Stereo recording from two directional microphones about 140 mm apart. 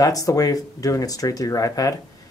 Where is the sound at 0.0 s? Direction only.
25° left (ahead or behind).